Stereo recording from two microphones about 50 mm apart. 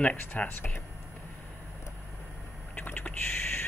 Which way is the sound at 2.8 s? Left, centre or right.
Left.